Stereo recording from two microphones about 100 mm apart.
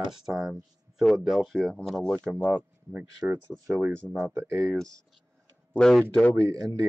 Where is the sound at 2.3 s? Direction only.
15° right (ahead or behind).